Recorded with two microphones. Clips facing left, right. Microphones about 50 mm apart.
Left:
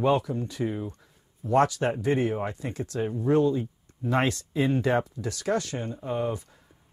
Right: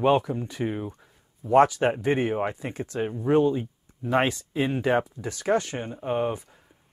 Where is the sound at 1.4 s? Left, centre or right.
Right.